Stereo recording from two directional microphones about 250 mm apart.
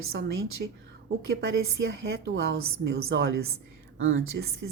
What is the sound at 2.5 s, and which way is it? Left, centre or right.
Speech, right.